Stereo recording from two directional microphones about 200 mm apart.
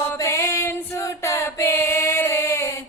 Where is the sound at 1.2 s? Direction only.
15° left (ahead or behind).